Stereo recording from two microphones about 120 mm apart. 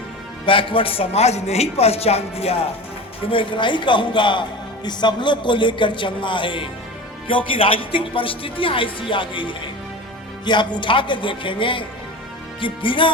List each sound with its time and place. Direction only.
0.4 s a woman's voice: 45° left (ahead or behind)
3.3 s speech: 45° left (ahead or behind)